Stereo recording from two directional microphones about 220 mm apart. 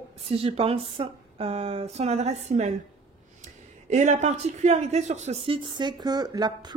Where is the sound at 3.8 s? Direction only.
35° right (ahead or behind).